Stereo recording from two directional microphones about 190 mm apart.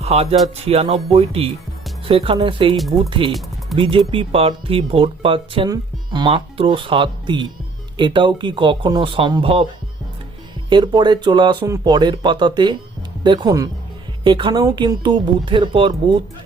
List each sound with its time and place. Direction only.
0.0 s speech: 35° right (ahead or behind)
2.7 s speech: centre (ahead or behind)
3.1 s speech: 25° right (ahead or behind)
10.7 s speech: 25° right (ahead or behind)